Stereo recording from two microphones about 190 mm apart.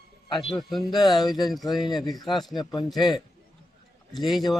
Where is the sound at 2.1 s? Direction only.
Centre (ahead or behind).